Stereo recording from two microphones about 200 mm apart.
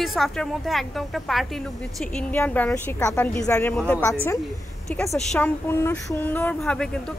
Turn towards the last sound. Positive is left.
turn(degrees=5)  # may be behind; listen again after turning